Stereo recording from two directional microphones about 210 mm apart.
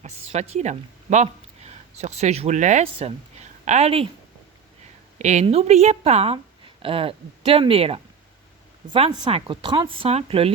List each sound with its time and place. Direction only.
0.0 s speech: 30° right (ahead or behind)
5.1 s a woman's voice: 35° right (ahead or behind)